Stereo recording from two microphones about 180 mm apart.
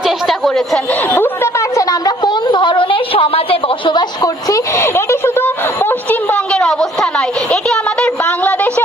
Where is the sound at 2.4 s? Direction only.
25° left (ahead or behind); by 6.7 s 5° left (ahead or behind).